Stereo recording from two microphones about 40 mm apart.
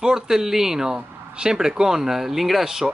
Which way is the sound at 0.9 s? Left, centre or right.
Right.